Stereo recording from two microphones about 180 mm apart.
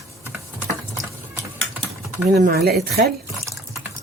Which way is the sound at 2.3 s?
60° right (ahead or behind).